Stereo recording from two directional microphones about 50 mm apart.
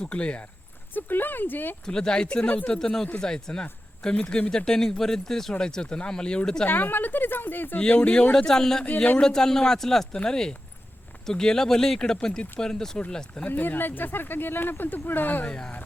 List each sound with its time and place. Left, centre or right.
0.0 s speech: left
0.9 s speech: left
1.8 s speech: centre
2.7 s speech: centre
6.7 s speech: left
7.8 s speech: left
13.5 s speech: left
15.4 s speech: centre